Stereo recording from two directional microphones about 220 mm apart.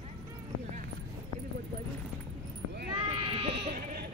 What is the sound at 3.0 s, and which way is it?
Goat, 20° right (ahead or behind).